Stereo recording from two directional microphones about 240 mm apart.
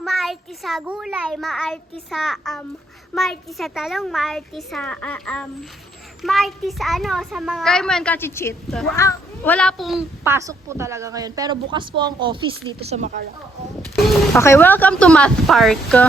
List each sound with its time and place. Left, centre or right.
0.0 s a child's voice: centre
10.3 s a woman's voice: centre; by 13.1 s right
13.9 s a child's voice: centre
14.3 s a child's voice: centre